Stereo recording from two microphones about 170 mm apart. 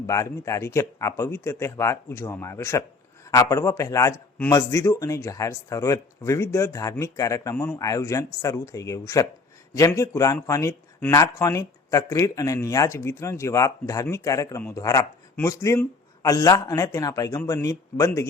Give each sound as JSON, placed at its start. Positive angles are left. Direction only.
{"t": 0.1, "sound": "speech", "side_deg": 15}